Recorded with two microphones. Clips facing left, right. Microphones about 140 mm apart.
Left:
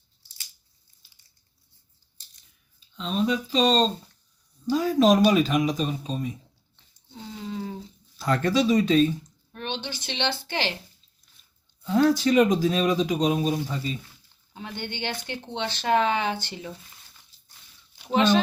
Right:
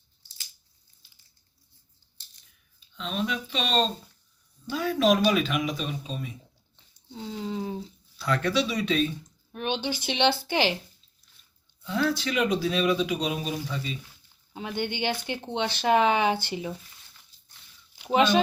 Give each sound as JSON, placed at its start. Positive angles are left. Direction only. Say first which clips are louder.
{"t": 2.9, "sound": "speech", "louder": "left 5 dB", "side_deg": 35}
{"t": 7.4, "sound": "a sound", "louder": "right 1 dB", "side_deg": -20}
{"t": 8.2, "sound": "speech", "louder": "left 3 dB", "side_deg": 45}
{"t": 9.5, "sound": "a woman's voice", "louder": "right 4 dB", "side_deg": -15}
{"t": 11.9, "sound": "speech", "louder": "left 7 dB", "side_deg": 45}
{"t": 14.5, "sound": "speech", "louder": "right 4 dB", "side_deg": -15}
{"t": 18.0, "sound": "speech", "louder": "even", "side_deg": -15}